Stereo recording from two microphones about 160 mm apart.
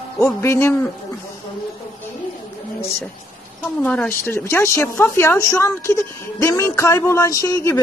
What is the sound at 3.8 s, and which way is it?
A woman's voice, 10° left (ahead or behind).